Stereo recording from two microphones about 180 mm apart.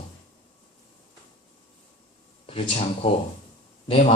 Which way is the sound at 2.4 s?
30° left (ahead or behind).